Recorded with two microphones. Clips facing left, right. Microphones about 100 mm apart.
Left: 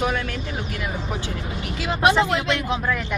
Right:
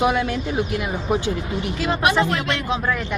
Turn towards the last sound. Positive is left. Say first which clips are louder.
# left 1 dB
turn(degrees=15)  # may be behind; listen again after turning